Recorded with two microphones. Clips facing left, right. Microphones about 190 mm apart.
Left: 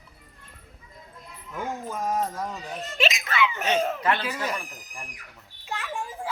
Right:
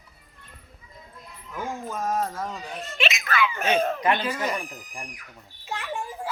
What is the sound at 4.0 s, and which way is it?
Speech, 15° right (ahead or behind).